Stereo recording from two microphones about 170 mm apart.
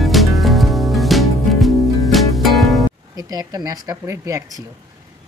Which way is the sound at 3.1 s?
20° right (ahead or behind).